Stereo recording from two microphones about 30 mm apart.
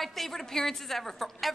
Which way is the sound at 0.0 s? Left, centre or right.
Centre.